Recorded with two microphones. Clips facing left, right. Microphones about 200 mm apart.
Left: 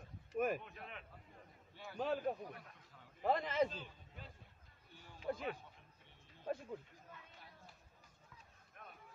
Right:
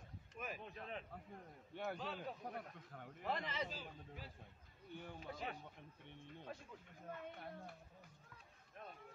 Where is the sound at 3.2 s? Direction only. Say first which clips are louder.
Left 9 dB; 50° left (ahead or behind).